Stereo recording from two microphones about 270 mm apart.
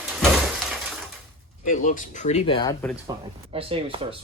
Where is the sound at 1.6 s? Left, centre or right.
Left.